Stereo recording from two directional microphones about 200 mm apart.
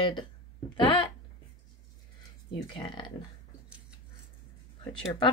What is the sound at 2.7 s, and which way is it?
Speech, 25° left (ahead or behind).